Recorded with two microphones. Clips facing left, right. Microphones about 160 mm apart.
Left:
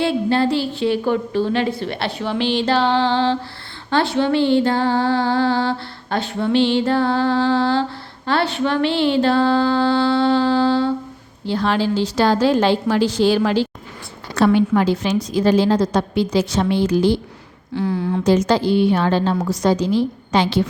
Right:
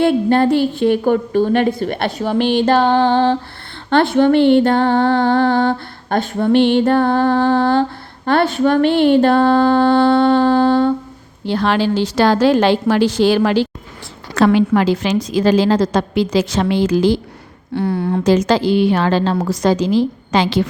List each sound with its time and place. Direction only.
0.0 s a sound: 50° right (ahead or behind)
11.4 s a woman's voice: 70° right (ahead or behind)
14.3 s a woman's voice: 90° right
17.7 s a woman's voice: 60° right (ahead or behind)
18.2 s a woman's voice: 90° right